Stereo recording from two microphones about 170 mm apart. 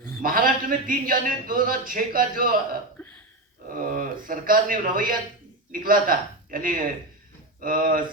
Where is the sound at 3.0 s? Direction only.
10° left (ahead or behind).